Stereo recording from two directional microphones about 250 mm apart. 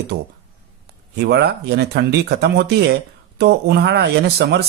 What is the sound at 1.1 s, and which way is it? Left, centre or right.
Speech, right.